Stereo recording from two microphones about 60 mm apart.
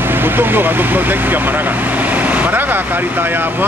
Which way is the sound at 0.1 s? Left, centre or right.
Right.